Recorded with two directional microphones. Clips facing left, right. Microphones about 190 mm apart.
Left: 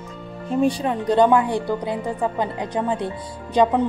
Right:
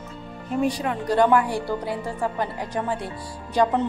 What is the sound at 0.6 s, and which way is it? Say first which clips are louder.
A woman's voice: left 4 dB; 30° left (ahead or behind).